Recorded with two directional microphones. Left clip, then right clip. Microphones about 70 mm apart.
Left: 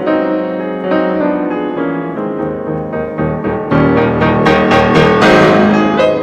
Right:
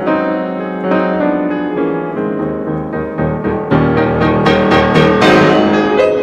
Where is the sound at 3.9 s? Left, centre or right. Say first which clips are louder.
Left 2 dB; centre.